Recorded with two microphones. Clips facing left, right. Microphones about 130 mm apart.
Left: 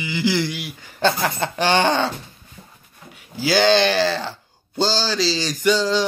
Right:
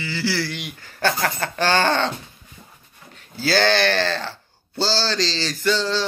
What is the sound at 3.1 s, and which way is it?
Speech, 10° left (ahead or behind).